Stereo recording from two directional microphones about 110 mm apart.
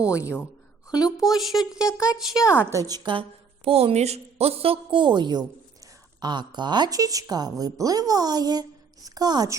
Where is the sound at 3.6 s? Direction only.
65° right (ahead or behind).